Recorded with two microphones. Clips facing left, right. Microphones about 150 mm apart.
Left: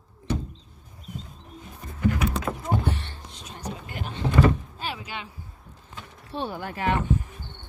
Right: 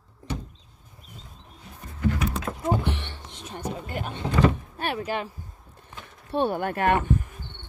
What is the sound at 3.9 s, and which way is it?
Power windows, 50° right (ahead or behind).